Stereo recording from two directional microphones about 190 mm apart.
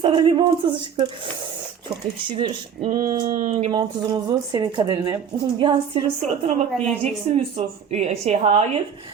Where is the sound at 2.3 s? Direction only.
20° right (ahead or behind).